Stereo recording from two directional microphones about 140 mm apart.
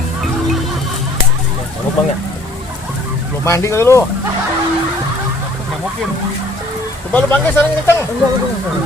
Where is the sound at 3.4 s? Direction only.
20° left (ahead or behind).